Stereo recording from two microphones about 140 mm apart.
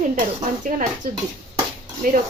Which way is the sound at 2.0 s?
90° right.